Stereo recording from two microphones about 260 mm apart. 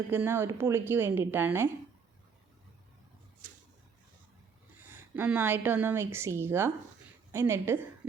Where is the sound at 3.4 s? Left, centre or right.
Right.